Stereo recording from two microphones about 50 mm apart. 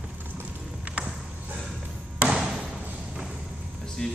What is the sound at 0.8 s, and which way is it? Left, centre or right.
Clip-clop, right.